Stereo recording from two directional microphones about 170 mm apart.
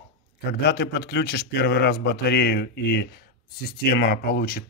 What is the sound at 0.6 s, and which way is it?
A man's voice, 80° left.